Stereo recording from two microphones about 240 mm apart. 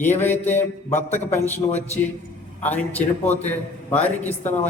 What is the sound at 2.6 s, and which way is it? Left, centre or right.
A man's voice, centre.